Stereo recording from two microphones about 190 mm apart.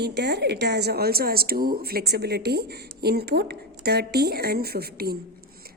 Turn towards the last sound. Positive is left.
turn(degrees=-55)  # may be behind; listen again after turning